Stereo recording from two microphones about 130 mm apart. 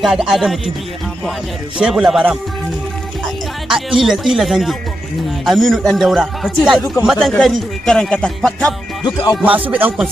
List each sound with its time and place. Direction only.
0.0 s speech: 5° right (ahead or behind)
1.8 s speech: 5° right (ahead or behind)
3.6 s speech: 5° right (ahead or behind)
9.0 s music: 35° left (ahead or behind)
9.7 s music: 15° right (ahead or behind)